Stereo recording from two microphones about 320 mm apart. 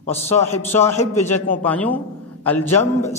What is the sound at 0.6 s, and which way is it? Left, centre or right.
A man's voice, centre.